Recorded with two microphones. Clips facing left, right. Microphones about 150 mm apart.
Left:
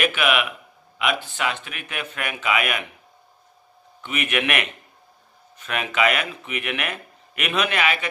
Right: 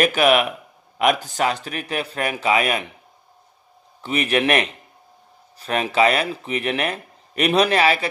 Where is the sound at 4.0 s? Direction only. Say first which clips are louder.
Right 5 dB; 35° right (ahead or behind).